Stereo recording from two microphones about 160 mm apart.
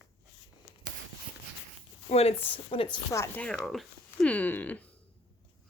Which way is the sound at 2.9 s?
10° left (ahead or behind).